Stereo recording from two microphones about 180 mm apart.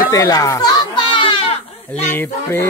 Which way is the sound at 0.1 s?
20° left (ahead or behind).